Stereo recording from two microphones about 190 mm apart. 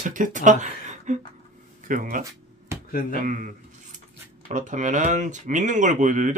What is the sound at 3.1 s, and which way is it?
Speech, 40° right (ahead or behind).